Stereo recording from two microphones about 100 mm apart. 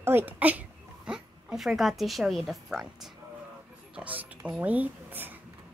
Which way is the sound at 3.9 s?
15° right (ahead or behind).